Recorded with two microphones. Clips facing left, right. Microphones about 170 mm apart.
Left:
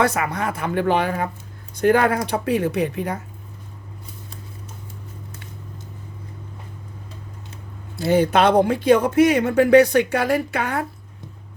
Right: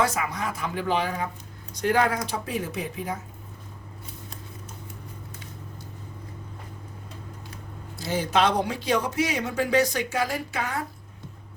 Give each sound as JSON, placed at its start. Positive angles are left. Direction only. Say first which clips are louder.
{"t": 0.0, "sound": "speech", "louder": "left 5 dB", "side_deg": 65}
{"t": 7.9, "sound": "speech", "louder": "left 7 dB", "side_deg": 65}